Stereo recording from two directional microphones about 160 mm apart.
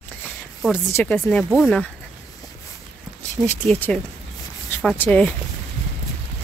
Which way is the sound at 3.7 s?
5° left (ahead or behind).